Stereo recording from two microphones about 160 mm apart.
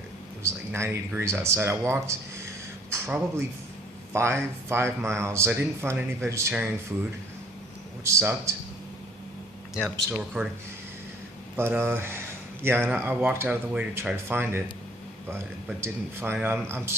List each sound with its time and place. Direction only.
0.4 s speech: 15° right (ahead or behind)
8.0 s speech: 15° right (ahead or behind)
10.1 s speech: 5° right (ahead or behind)
11.5 s speech: 15° right (ahead or behind)
15.8 s speech: 15° right (ahead or behind)